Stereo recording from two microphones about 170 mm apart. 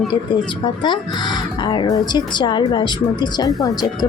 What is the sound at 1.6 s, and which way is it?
A woman's voice, 25° left (ahead or behind).